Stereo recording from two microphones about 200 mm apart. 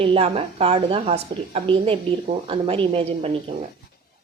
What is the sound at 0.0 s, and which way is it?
A woman's voice, 30° right (ahead or behind).